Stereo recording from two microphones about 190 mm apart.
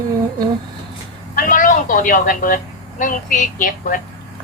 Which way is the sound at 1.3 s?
45° left (ahead or behind).